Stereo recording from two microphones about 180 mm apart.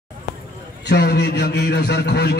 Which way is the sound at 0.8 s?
65° left (ahead or behind).